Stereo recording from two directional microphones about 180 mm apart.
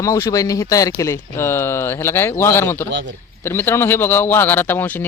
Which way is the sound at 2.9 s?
75° right (ahead or behind).